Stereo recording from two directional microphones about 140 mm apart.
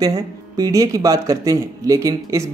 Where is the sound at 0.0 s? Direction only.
25° right (ahead or behind).